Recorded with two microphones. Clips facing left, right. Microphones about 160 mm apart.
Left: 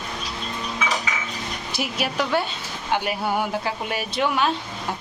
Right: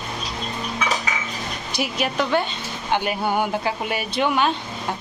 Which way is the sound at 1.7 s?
5° left (ahead or behind).